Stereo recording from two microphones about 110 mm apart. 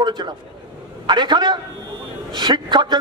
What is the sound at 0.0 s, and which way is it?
A man's voice, 45° right (ahead or behind).